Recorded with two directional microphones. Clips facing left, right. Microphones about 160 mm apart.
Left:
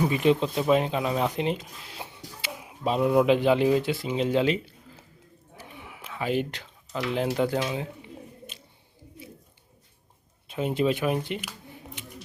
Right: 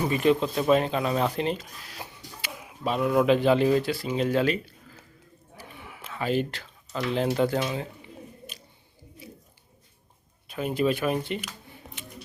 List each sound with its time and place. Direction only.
0.0 s speech: 15° left (ahead or behind)
9.2 s a sound: 25° left (ahead or behind)
10.5 s speech: 25° left (ahead or behind)